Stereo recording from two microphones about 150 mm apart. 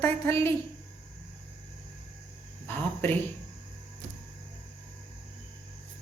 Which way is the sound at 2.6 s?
15° left (ahead or behind).